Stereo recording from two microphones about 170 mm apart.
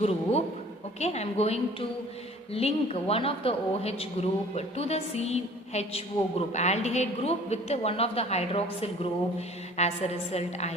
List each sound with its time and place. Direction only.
0.0 s speech: 40° left (ahead or behind)